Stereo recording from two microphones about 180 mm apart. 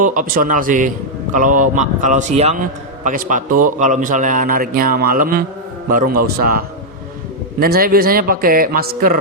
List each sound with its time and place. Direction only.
0.0 s speech: 45° right (ahead or behind)
7.6 s speech: 55° right (ahead or behind)